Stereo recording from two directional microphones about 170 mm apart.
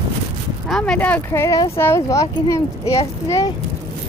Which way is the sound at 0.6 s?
5° left (ahead or behind).